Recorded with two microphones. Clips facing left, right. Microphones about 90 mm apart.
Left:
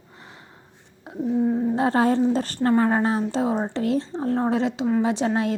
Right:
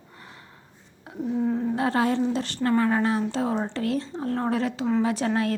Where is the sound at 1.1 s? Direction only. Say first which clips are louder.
Left 4 dB; 25° left (ahead or behind).